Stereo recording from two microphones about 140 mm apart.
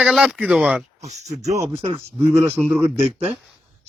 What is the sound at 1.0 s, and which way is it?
Speech, 55° right (ahead or behind).